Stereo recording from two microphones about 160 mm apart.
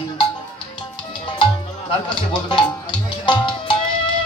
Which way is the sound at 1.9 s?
30° left (ahead or behind).